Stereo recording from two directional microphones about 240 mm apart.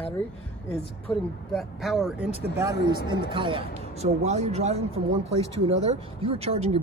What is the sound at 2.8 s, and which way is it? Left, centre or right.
Speech, left.